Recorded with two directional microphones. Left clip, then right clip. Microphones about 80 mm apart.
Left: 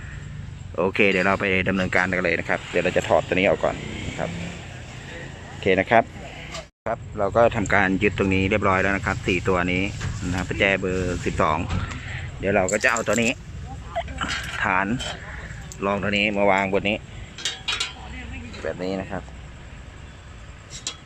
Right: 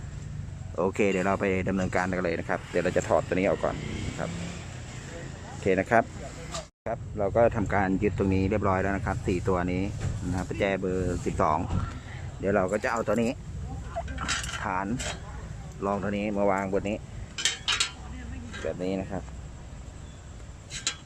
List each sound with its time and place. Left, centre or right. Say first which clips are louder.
0.8 s speech: left 6 dB; centre
5.6 s speech: left 5 dB; centre
9.6 s speech: left 7 dB; centre
14.3 s a sound: left 3 dB; centre
14.6 s speech: left 8 dB; centre
16.6 s speech: left 7 dB; left
17.7 s a sound: left 2 dB; centre
18.6 s speech: left 3 dB; centre